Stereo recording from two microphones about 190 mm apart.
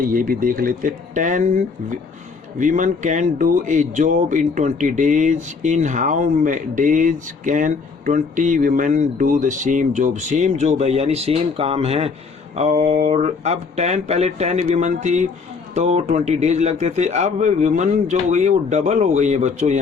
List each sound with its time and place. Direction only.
0.0 s speech: 45° right (ahead or behind)